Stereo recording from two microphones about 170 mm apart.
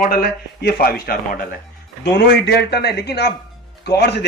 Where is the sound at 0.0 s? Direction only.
60° left (ahead or behind).